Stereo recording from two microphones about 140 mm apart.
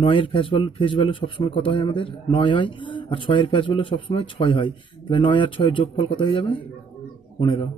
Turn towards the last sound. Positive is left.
turn(degrees=35)  # may be behind; listen again after turning